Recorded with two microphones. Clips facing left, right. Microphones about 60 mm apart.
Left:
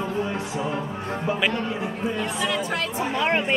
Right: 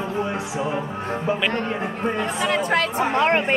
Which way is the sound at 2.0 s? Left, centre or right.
Right.